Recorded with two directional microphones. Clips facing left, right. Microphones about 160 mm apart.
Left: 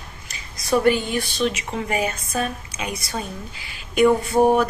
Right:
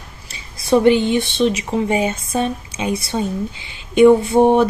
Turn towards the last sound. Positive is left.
turn(degrees=-25)  # may be behind; listen again after turning